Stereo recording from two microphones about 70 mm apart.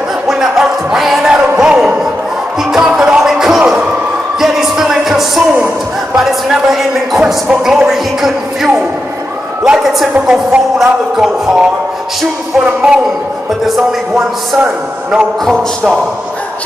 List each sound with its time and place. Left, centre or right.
0.3 s speech: centre
2.7 s music: centre
6.1 s speech: centre
10.5 s music: centre
14.6 s music: centre